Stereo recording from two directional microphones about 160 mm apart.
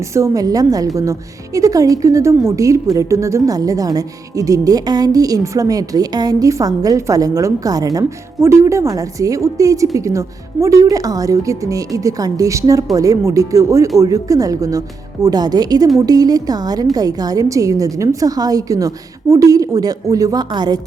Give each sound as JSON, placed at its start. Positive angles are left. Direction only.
{"t": 0.0, "sound": "a woman's voice", "side_deg": -20}